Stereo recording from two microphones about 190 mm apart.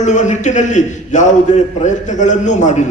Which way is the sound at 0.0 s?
40° left (ahead or behind).